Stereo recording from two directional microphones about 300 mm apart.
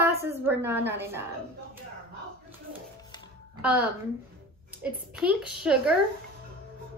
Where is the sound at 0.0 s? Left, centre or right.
Centre.